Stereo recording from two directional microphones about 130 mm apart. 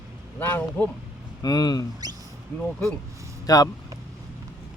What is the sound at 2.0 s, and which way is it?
Mouse, 30° right (ahead or behind).